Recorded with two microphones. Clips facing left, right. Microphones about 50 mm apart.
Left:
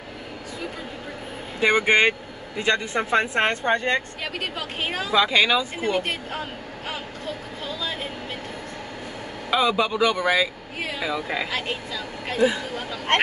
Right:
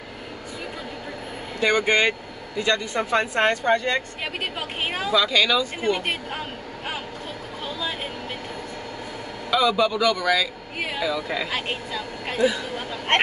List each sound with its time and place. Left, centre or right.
1.6 s speech: centre
4.4 s a woman's voice: centre
5.1 s speech: left
9.5 s speech: left
11.5 s speech: right